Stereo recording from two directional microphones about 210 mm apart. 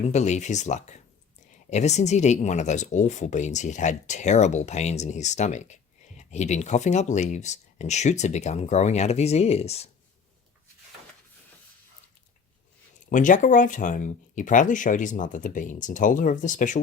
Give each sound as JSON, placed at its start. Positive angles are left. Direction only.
{"t": 0.0, "sound": "speech", "side_deg": 35}
{"t": 13.1, "sound": "speech", "side_deg": 40}